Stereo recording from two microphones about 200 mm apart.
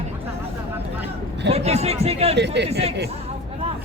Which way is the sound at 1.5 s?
30° right (ahead or behind).